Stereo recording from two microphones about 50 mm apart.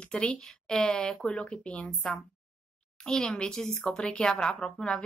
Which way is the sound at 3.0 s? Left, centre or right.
Centre.